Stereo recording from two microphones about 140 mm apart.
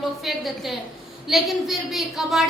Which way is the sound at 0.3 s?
Centre (ahead or behind).